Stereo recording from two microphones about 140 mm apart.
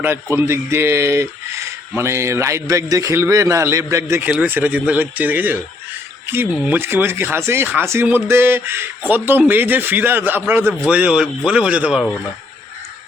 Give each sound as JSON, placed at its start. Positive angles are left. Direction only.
{"t": 0.0, "sound": "a man's voice", "side_deg": -15}